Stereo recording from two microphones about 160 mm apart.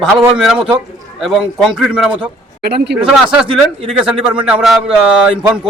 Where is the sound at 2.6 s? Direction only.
90° right.